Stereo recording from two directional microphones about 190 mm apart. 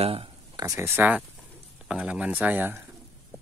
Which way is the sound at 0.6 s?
15° right (ahead or behind).